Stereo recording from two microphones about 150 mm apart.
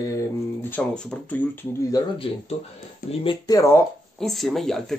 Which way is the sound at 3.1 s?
35° left (ahead or behind).